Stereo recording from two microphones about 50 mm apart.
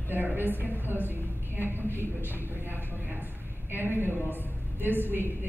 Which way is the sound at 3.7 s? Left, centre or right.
Right.